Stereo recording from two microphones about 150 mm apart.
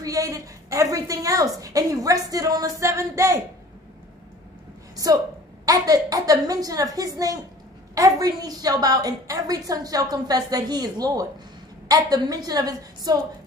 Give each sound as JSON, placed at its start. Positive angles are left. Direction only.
{"t": 0.0, "sound": "a woman's voice", "side_deg": -25}
{"t": 4.9, "sound": "a woman's voice", "side_deg": -25}